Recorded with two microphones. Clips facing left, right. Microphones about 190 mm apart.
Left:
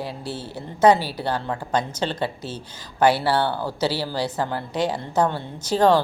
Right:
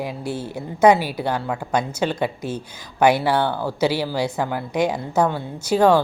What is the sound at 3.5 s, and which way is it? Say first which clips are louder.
Speech: right 2 dB; 10° left (ahead or behind).